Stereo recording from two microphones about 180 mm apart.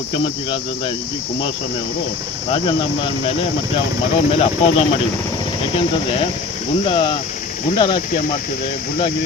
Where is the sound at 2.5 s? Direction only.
25° left (ahead or behind).